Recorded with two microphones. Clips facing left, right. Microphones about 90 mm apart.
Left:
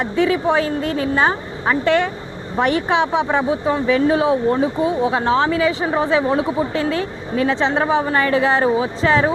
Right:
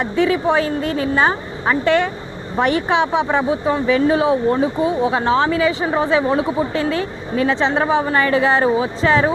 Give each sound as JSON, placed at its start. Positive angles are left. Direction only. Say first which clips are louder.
{"t": 0.0, "sound": "a woman's voice", "louder": "even", "side_deg": -25}